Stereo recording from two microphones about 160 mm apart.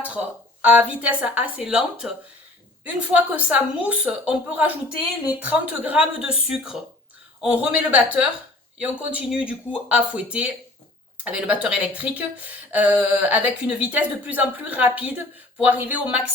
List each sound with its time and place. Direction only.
0.6 s speech: 10° right (ahead or behind)